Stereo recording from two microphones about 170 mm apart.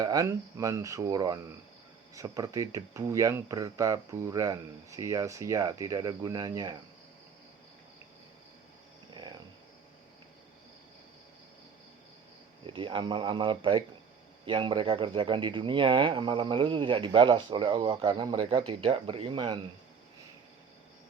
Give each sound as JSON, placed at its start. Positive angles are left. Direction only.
{"t": 0.0, "sound": "speech", "side_deg": -20}
{"t": 12.6, "sound": "speech", "side_deg": -30}